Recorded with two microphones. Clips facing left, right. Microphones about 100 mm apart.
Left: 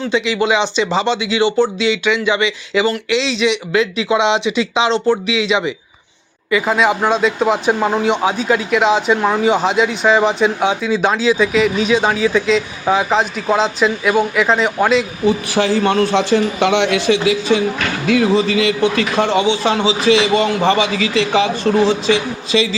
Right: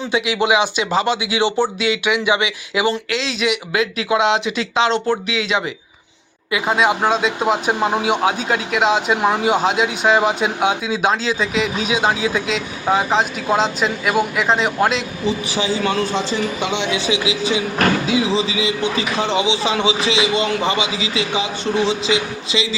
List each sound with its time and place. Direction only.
0.1 s speech: 10° right (ahead or behind)
3.1 s speech: centre (ahead or behind)
9.1 s speech: 15° right (ahead or behind)
9.5 s speech: 5° right (ahead or behind)
15.3 s a man's voice: 55° left (ahead or behind)
18.0 s a man's voice: 60° left (ahead or behind)
19.2 s a man's voice: 45° left (ahead or behind)
20.1 s a man's voice: 50° left (ahead or behind)